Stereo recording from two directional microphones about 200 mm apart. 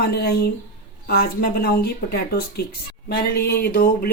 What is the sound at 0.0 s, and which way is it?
Speech, 50° left (ahead or behind).